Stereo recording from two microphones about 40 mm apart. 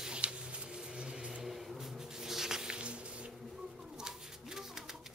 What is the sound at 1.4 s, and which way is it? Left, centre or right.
Squish, centre.